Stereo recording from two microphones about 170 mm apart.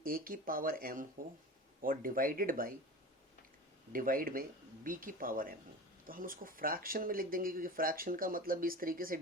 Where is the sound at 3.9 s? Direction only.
55° right (ahead or behind).